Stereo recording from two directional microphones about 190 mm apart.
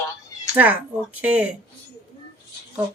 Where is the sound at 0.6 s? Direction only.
10° right (ahead or behind).